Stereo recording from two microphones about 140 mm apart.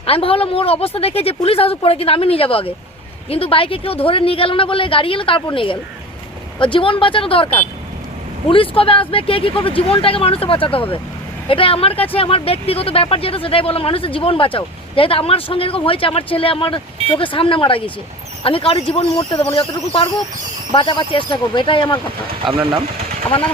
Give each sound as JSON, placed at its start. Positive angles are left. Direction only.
{"t": 0.0, "sound": "a woman's voice", "side_deg": 40}
{"t": 22.4, "sound": "speech", "side_deg": -35}